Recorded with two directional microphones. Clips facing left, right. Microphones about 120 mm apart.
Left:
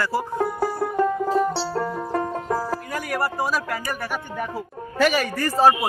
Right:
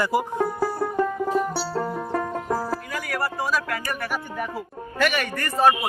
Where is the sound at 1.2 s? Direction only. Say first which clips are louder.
Left 2 dB; 30° left (ahead or behind).